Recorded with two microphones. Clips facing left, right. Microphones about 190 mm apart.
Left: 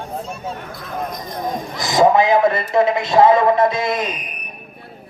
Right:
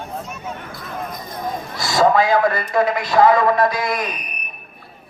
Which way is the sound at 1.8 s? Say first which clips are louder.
Left 2 dB; 20° left (ahead or behind).